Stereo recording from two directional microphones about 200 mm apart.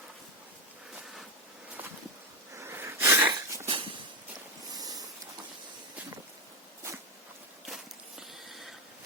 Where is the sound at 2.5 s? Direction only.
10° right (ahead or behind).